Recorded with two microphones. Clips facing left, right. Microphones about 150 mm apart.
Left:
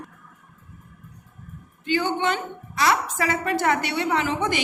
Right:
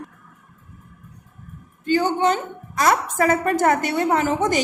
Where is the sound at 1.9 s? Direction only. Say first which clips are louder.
Right 4 dB; 40° right (ahead or behind).